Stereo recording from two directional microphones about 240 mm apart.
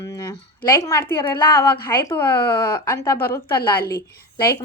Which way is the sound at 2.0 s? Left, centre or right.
Centre.